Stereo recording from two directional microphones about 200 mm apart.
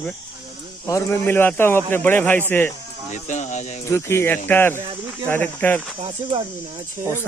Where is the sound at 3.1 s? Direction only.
35° left (ahead or behind).